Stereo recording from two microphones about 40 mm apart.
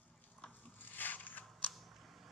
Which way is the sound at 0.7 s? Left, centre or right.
Left.